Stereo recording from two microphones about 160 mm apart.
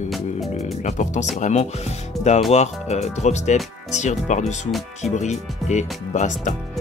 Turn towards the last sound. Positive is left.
turn(degrees=50)  # may be behind; listen again after turning